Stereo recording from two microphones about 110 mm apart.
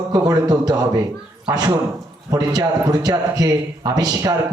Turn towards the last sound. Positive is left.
turn(degrees=-35)  # may be behind; listen again after turning